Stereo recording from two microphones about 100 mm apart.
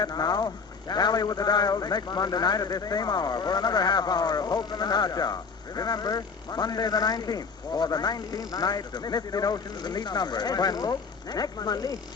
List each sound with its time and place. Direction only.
0.0 s a man's voice: 40° left (ahead or behind)